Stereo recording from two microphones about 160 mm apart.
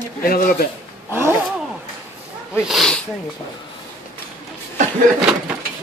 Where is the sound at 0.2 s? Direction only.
65° left (ahead or behind).